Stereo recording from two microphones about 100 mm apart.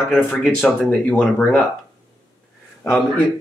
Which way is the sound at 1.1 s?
15° left (ahead or behind).